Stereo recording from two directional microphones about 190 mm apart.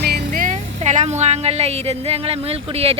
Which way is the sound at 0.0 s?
50° right (ahead or behind).